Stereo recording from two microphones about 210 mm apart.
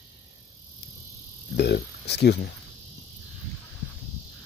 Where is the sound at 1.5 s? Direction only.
50° left (ahead or behind).